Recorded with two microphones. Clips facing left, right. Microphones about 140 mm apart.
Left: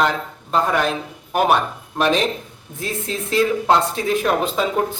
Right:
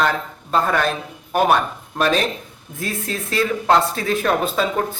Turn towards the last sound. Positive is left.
turn(degrees=15)  # may be behind; listen again after turning